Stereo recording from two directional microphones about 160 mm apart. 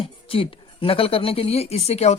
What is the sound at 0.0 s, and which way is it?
Speech, 35° left (ahead or behind).